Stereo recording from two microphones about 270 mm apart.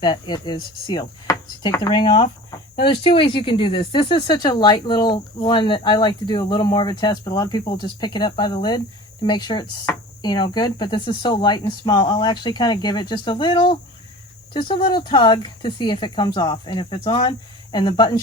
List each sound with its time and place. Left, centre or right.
0.0 s speech: centre